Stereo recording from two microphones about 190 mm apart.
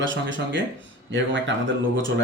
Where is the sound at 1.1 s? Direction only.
70° right (ahead or behind).